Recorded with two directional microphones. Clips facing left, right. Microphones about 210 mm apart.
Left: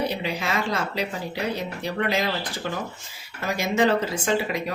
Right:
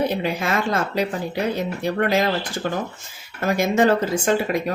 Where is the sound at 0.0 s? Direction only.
50° right (ahead or behind).